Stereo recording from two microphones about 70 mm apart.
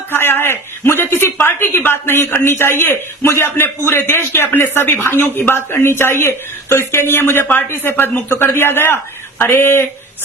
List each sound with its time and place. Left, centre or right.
0.1 s a man's voice: left